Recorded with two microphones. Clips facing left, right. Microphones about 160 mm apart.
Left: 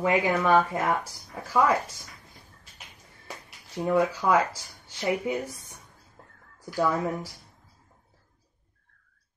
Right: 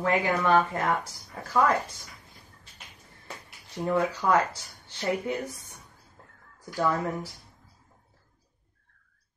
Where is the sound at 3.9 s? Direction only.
10° left (ahead or behind).